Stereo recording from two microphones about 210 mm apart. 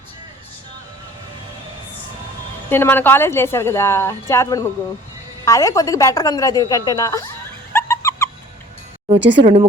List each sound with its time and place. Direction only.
2.6 s a woman's voice: 10° left (ahead or behind)
7.7 s a sound: 10° left (ahead or behind)
9.1 s speech: 60° right (ahead or behind)
9.4 s speech: 30° right (ahead or behind)